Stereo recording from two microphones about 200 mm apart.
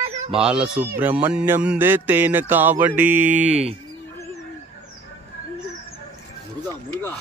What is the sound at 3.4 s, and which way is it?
Speech, 35° right (ahead or behind).